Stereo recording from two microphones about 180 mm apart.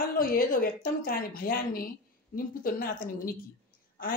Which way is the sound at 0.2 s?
55° left (ahead or behind).